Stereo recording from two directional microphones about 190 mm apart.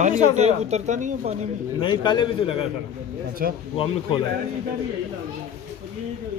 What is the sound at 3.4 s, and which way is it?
Speech, 50° right (ahead or behind).